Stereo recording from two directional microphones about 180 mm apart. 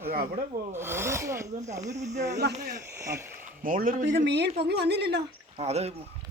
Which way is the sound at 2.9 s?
15° right (ahead or behind).